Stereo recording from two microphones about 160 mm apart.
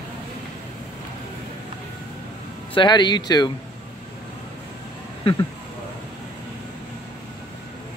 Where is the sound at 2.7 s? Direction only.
30° left (ahead or behind).